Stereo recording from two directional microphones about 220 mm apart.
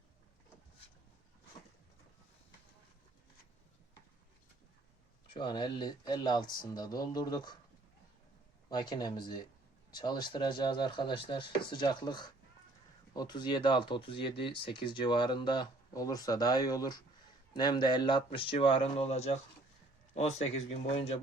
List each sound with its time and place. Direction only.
5.3 s speech: 20° left (ahead or behind)
8.7 s speech: 20° left (ahead or behind)